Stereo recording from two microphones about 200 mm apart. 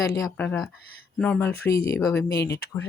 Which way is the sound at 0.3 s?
10° left (ahead or behind).